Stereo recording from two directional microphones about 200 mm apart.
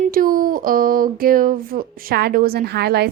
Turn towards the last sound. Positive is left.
turn(degrees=-55)  # may be behind; listen again after turning